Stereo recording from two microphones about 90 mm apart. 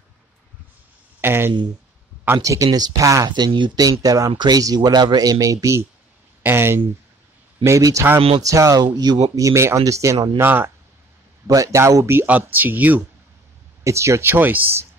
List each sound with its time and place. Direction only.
1.2 s speech: 25° right (ahead or behind)
3.3 s speech: 55° right (ahead or behind)
4.0 s speech: 40° right (ahead or behind)
8.8 s speech: 50° right (ahead or behind)
10.3 s speech: 25° right (ahead or behind)
11.4 s speech: 40° right (ahead or behind)
12.3 s speech: 20° right (ahead or behind)
13.8 s speech: 35° right (ahead or behind)